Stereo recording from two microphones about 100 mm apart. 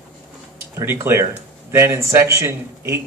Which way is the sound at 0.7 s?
25° right (ahead or behind).